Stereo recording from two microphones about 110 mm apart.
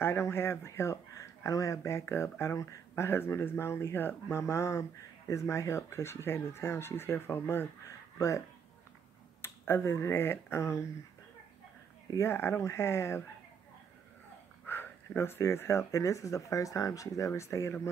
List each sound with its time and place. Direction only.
0.0 s speech: 20° left (ahead or behind)
9.4 s speech: 25° left (ahead or behind)
12.1 s speech: 25° left (ahead or behind)
14.7 s speech: 20° left (ahead or behind)